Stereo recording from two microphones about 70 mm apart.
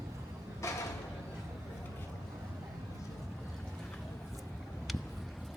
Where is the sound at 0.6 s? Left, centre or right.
Left.